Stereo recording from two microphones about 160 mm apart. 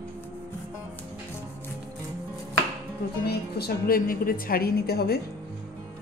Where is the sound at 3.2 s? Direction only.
70° left (ahead or behind).